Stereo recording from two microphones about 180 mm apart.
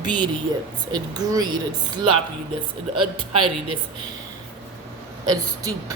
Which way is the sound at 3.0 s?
30° right (ahead or behind).